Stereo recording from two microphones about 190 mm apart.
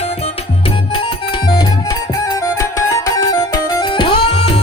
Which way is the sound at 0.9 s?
25° left (ahead or behind).